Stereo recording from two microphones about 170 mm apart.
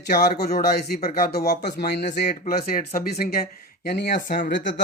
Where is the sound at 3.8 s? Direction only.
80° left.